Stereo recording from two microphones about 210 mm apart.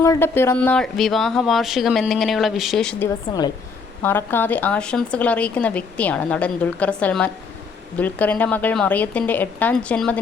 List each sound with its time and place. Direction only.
0.0 s speech: 15° left (ahead or behind)
3.2 s a woman's voice: 20° left (ahead or behind)